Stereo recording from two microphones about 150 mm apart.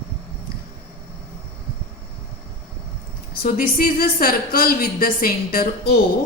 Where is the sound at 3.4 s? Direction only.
75° left (ahead or behind).